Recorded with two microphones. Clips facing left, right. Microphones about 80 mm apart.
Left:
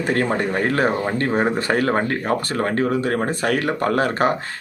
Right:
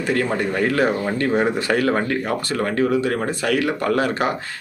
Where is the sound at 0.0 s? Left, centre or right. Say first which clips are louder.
Left 1 dB; left.